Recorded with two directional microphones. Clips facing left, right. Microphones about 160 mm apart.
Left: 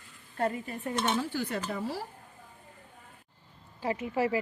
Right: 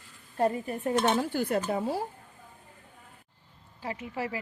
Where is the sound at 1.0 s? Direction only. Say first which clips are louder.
Right 4 dB; 50° right (ahead or behind).